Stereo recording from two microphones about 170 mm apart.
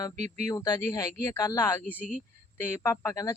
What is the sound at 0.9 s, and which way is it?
Speech, 15° left (ahead or behind).